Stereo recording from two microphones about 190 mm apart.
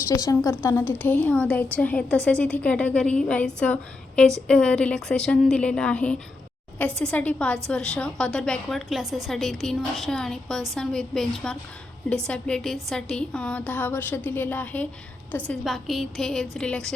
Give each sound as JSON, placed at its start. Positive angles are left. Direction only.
{"t": 0.1, "sound": "a woman's voice", "side_deg": 20}